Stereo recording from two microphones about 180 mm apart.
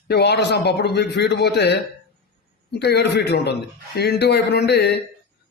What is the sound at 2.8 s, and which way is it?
A man's voice, 70° left (ahead or behind).